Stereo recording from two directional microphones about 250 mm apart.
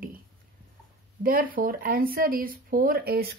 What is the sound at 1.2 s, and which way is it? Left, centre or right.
Speech, right.